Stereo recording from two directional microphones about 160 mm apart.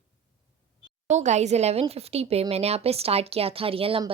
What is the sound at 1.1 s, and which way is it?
A woman's voice, 45° right (ahead or behind).